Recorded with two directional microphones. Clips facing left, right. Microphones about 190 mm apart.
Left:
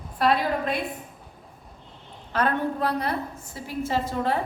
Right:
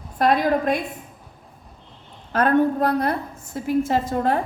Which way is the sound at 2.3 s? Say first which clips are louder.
Right 7 dB; 45° right (ahead or behind).